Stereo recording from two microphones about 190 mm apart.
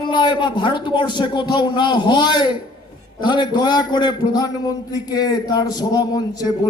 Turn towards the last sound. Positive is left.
turn(degrees=20)  # may be behind; listen again after turning